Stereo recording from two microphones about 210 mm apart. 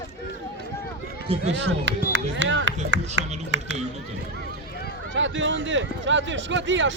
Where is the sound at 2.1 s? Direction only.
60° right (ahead or behind).